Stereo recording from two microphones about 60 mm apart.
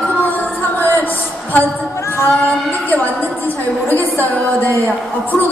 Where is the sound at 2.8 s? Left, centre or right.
Left.